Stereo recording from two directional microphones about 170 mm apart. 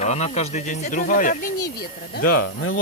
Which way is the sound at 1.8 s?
65° left (ahead or behind).